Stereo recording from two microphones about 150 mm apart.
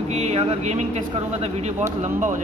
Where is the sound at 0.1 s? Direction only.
45° right (ahead or behind).